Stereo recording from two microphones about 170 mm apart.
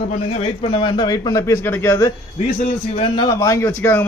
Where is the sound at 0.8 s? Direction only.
25° left (ahead or behind).